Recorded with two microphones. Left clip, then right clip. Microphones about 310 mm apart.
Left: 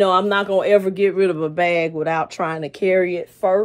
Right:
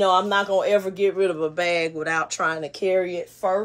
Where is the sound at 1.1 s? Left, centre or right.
Left.